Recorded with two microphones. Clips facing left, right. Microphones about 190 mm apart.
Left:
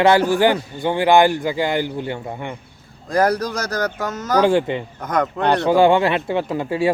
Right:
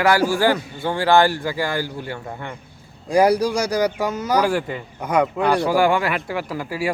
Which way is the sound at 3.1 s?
10° right (ahead or behind).